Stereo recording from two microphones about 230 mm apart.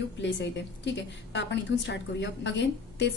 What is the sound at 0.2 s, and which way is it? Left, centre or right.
A woman's voice, left.